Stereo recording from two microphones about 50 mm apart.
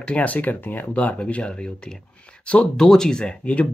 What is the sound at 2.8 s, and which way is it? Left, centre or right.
Speech, centre.